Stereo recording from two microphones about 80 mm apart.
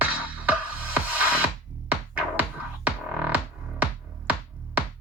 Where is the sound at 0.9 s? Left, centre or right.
Centre.